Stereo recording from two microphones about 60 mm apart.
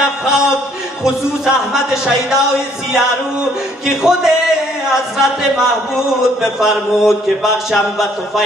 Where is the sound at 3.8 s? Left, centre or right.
Centre.